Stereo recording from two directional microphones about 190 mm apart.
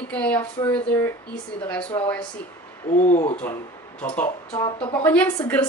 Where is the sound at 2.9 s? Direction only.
40° left (ahead or behind).